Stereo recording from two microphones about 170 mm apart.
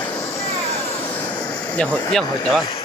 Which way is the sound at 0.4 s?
35° left (ahead or behind).